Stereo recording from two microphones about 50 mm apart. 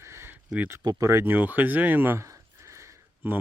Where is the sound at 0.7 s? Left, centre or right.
Right.